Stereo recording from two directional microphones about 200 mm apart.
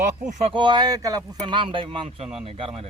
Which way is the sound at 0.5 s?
20° right (ahead or behind).